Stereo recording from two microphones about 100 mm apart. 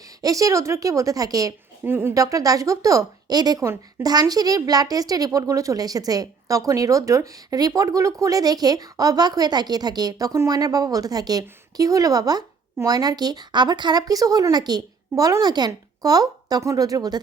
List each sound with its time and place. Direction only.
0.2 s a woman's voice: 35° right (ahead or behind)
1.8 s a woman's voice: 20° right (ahead or behind)
2.1 s a woman's voice: 35° right (ahead or behind)